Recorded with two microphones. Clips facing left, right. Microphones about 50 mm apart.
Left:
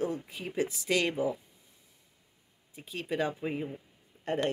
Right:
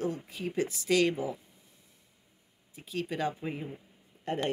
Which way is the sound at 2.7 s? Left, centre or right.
Centre.